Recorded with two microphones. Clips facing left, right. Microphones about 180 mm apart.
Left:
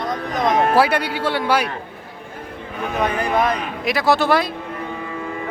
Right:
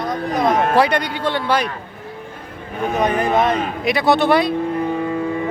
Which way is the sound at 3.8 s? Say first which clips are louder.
Right 2 dB; centre (ahead or behind).